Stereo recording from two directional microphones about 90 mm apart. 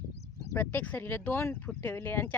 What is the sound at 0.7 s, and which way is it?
Speech, 20° left (ahead or behind).